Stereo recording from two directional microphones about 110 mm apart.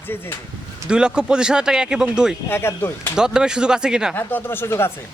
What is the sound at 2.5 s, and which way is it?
Speech, 20° left (ahead or behind).